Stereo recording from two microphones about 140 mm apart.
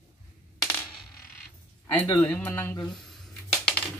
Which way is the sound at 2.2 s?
10° left (ahead or behind).